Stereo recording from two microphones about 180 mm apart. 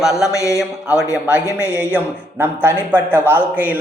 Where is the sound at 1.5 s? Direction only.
15° left (ahead or behind).